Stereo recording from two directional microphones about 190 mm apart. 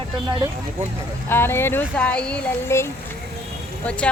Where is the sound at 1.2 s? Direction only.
10° left (ahead or behind).